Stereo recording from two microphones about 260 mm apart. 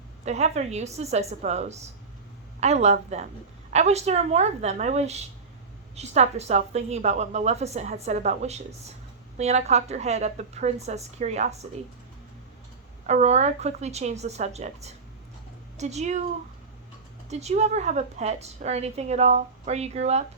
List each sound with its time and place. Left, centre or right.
0.3 s a woman's voice: right
13.1 s a woman's voice: right
17.2 s a woman's voice: right